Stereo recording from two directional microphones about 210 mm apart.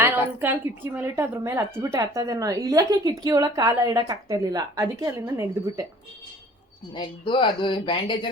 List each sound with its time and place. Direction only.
0.0 s a woman's voice: 10° right (ahead or behind)
6.9 s speech: 25° left (ahead or behind)